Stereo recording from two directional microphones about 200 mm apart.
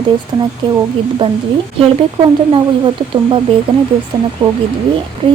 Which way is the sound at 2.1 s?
25° right (ahead or behind).